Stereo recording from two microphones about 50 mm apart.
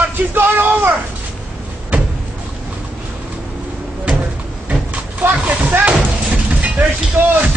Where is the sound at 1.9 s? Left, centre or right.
Right.